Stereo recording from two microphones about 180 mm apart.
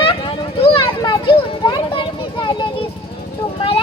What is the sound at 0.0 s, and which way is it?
Vehicle, 30° left (ahead or behind).